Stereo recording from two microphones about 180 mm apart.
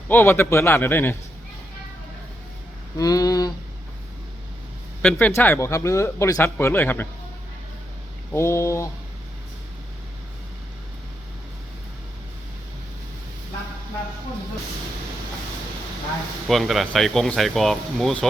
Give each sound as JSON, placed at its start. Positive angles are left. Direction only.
{"t": 0.1, "sound": "speech", "side_deg": 10}
{"t": 3.0, "sound": "a sound", "side_deg": 20}
{"t": 5.0, "sound": "speech", "side_deg": 10}
{"t": 8.3, "sound": "speech", "side_deg": 15}
{"t": 16.5, "sound": "speech", "side_deg": 0}